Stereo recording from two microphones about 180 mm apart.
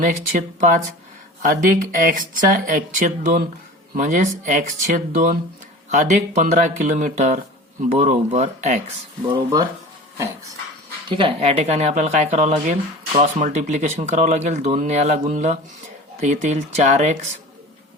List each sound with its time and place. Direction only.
0.0 s speech: 45° right (ahead or behind)
9.2 s speech: 20° right (ahead or behind)
11.1 s speech: 35° right (ahead or behind)